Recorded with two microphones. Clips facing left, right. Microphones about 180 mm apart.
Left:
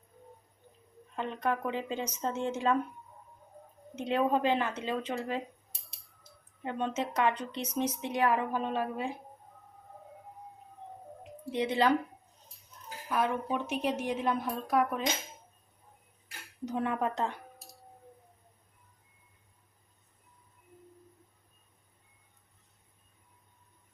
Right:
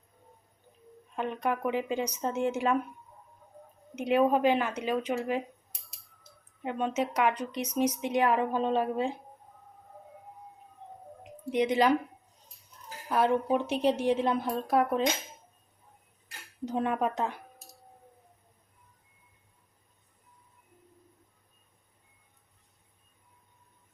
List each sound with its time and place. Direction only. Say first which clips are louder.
1.1 s speech: right 2 dB; 15° right (ahead or behind)
3.9 s speech: right 4 dB; 10° right (ahead or behind)
6.6 s speech: right 3 dB; 15° right (ahead or behind)
11.5 s speech: right 3 dB; 15° right (ahead or behind)
13.1 s a woman's voice: right 5 dB; 30° right (ahead or behind)
16.6 s speech: right 2 dB; 25° right (ahead or behind)